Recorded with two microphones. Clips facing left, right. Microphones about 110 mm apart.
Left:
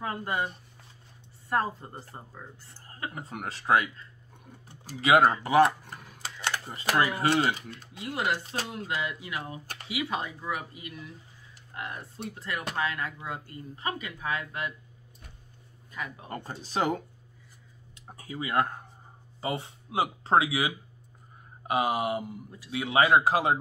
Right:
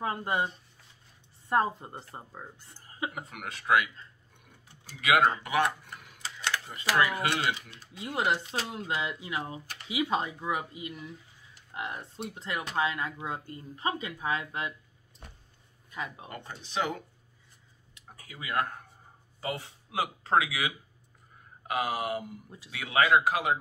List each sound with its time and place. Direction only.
0.0 s speech: 20° right (ahead or behind)
1.5 s speech: 20° right (ahead or behind)
3.3 s speech: 35° left (ahead or behind)
5.0 s speech: 30° left (ahead or behind)
8.0 s speech: 20° right (ahead or behind)
15.9 s speech: 20° right (ahead or behind)
16.3 s speech: 40° left (ahead or behind)